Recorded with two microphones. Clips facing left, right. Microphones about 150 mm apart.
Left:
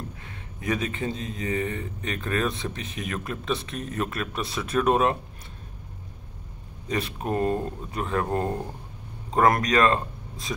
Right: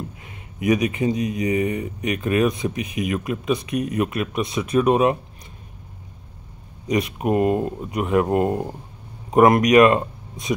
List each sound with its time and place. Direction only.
0.2 s speech: 15° right (ahead or behind)
6.9 s speech: 15° right (ahead or behind)